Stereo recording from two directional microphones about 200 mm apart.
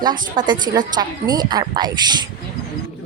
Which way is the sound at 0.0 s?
20° right (ahead or behind).